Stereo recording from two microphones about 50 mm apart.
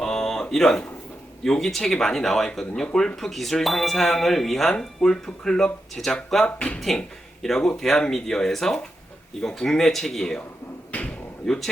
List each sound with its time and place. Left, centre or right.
0.0 s a sound: centre
1.5 s speech: centre
6.4 s speech: left
6.7 s speech: centre
10.9 s a sound: left
11.4 s speech: centre